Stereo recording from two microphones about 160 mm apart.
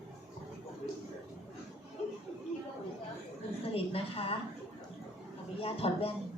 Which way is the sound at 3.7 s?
35° left (ahead or behind).